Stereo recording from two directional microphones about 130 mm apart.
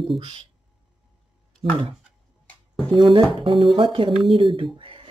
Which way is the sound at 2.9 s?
30° right (ahead or behind).